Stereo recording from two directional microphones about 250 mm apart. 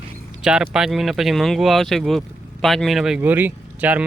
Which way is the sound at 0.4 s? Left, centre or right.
Centre.